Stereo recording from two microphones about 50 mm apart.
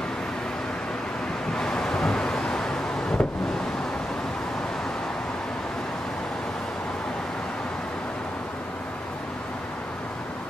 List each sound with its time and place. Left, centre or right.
1.6 s vehicle: centre